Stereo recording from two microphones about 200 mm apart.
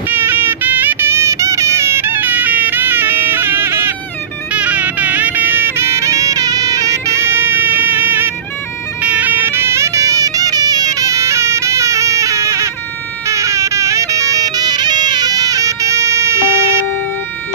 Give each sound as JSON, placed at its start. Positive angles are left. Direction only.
{"t": 0.1, "sound": "music", "side_deg": -10}